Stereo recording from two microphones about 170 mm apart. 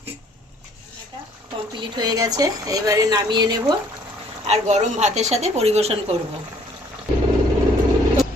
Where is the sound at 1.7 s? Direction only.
25° right (ahead or behind).